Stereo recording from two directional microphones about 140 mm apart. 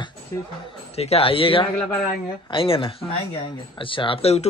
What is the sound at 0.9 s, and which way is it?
A man's voice, 45° left (ahead or behind).